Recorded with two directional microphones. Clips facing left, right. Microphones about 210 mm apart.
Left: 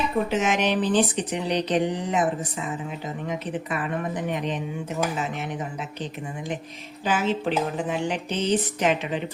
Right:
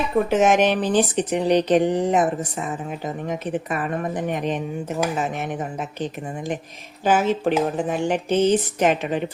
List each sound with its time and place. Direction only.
0.3 s speech: 50° right (ahead or behind)